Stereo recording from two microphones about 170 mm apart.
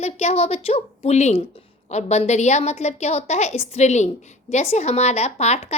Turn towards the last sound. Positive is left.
turn(degrees=40)  # may be behind; listen again after turning